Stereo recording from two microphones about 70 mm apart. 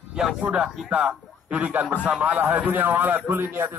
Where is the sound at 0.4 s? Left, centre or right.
Centre.